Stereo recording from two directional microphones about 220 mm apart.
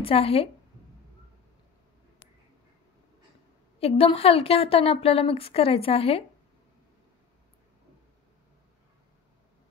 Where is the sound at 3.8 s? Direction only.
25° left (ahead or behind).